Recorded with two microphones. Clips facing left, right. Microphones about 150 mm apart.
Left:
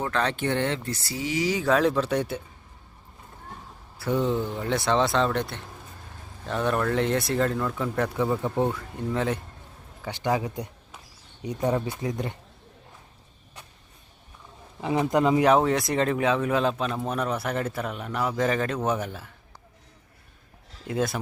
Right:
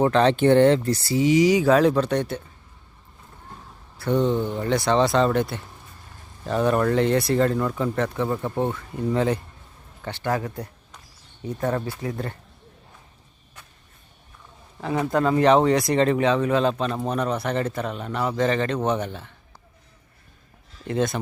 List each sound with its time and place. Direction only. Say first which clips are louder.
0.0 s speech: right 9 dB; 25° right (ahead or behind)
1.1 s speech: right 9 dB; 20° right (ahead or behind)
1.6 s speech: right 4 dB; centre (ahead or behind)
3.9 s speech: right 3 dB; 5° left (ahead or behind)
10.0 s speech: even; 15° left (ahead or behind)
14.8 s speech: even; 15° left (ahead or behind)
20.8 s speech: right 3 dB; 5° left (ahead or behind)